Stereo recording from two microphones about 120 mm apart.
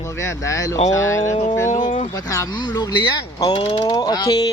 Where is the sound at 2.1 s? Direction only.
30° left (ahead or behind); by 3.9 s 45° left (ahead or behind).